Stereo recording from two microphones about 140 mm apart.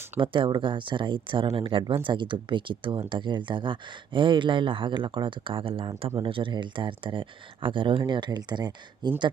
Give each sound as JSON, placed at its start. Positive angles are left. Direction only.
{"t": 0.2, "sound": "speech", "side_deg": -35}